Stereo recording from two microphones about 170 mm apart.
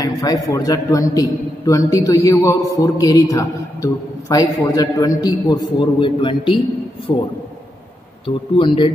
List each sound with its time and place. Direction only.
0.0 s a man's voice: 20° left (ahead or behind)
8.3 s speech: 30° left (ahead or behind)